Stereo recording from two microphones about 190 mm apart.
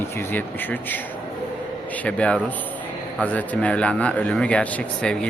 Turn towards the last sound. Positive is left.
turn(degrees=5)  # may be behind; listen again after turning